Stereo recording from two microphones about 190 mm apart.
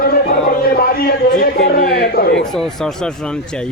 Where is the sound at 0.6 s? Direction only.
50° left (ahead or behind).